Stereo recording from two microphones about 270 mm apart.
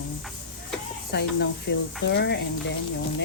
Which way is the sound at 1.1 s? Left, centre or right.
Left.